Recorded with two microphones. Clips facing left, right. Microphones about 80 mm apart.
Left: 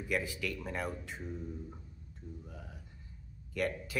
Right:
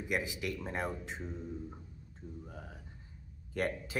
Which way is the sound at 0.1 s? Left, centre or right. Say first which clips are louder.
Even; right.